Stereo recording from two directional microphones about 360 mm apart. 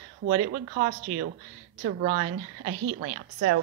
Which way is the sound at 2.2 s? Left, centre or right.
Right.